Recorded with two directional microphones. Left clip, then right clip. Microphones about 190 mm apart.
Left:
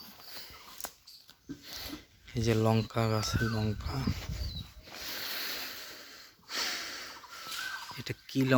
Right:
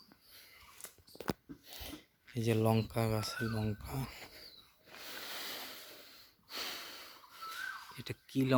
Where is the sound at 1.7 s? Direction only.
10° right (ahead or behind).